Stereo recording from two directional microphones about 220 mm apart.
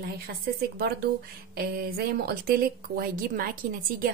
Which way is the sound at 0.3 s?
45° right (ahead or behind).